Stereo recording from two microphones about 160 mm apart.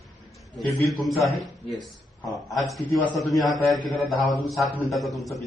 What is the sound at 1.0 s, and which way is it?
Speech, centre (ahead or behind).